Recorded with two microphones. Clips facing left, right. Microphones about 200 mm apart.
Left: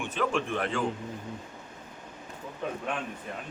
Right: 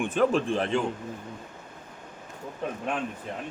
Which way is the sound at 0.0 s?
45° right (ahead or behind).